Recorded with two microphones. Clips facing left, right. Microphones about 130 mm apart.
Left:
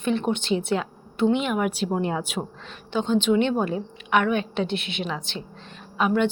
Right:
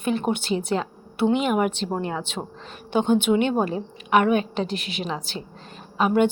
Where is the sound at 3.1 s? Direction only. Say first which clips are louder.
Left 3 dB; 10° right (ahead or behind).